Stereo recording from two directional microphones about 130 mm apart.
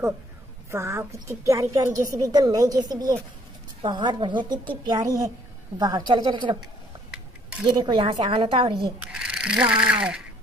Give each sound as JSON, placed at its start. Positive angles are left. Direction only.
{"t": 0.7, "sound": "a woman's voice", "side_deg": -20}
{"t": 7.6, "sound": "a woman's voice", "side_deg": -35}
{"t": 9.0, "sound": "speech", "side_deg": -5}